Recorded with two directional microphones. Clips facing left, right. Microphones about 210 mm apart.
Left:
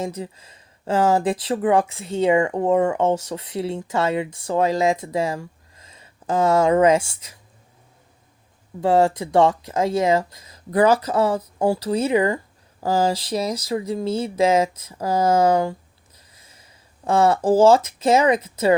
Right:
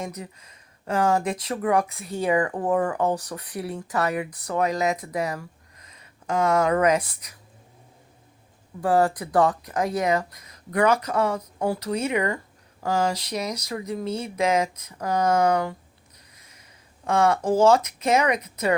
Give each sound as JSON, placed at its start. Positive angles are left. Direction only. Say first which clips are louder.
{"t": 0.0, "sound": "speech", "louder": "left 6 dB", "side_deg": 30}
{"t": 8.8, "sound": "speech", "louder": "left 3 dB", "side_deg": 25}
{"t": 16.1, "sound": "snort", "louder": "left 4 dB", "side_deg": 30}
{"t": 17.1, "sound": "speech", "louder": "left 4 dB", "side_deg": 30}